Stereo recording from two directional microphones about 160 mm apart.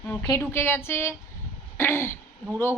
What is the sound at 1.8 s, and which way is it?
Throat clearing, 15° left (ahead or behind).